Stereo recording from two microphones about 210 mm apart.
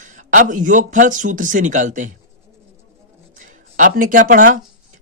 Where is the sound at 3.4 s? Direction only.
40° right (ahead or behind).